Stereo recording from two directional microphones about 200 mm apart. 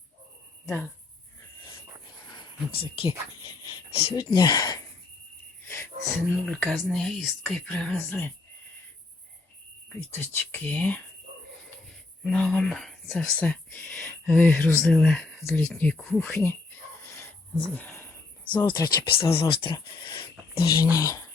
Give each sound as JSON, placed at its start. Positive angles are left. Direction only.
{"t": 0.6, "sound": "speech", "side_deg": 10}
{"t": 2.3, "sound": "speech", "side_deg": 25}
{"t": 5.6, "sound": "music", "side_deg": 10}
{"t": 6.5, "sound": "speech", "side_deg": 5}
{"t": 10.2, "sound": "speech", "side_deg": 10}
{"t": 12.2, "sound": "speech", "side_deg": 0}
{"t": 17.0, "sound": "a sound", "side_deg": 15}
{"t": 18.6, "sound": "speech", "side_deg": 20}